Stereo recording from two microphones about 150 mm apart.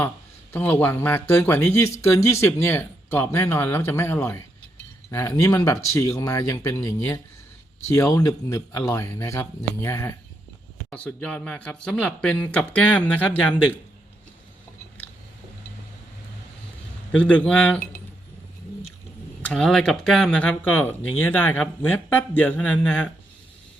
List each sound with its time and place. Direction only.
0.5 s speech: 15° left (ahead or behind)
17.1 s speech: 10° left (ahead or behind)
19.4 s speech: 5° left (ahead or behind)